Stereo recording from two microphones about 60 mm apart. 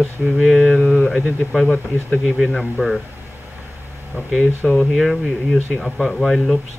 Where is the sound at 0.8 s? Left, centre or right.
Left.